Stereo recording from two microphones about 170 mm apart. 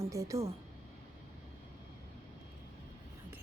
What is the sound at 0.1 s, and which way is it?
Speech, 20° right (ahead or behind).